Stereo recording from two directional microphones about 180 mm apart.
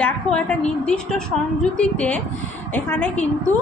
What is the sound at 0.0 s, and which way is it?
A woman's voice, 5° left (ahead or behind).